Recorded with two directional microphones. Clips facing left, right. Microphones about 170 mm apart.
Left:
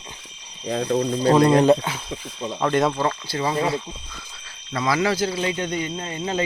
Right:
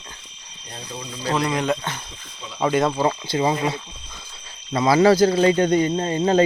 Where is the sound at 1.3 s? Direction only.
30° left (ahead or behind).